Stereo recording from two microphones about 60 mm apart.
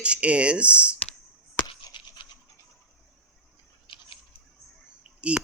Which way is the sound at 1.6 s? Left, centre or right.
Left.